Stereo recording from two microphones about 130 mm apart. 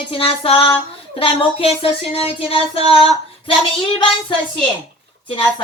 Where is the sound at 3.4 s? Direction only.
40° left (ahead or behind).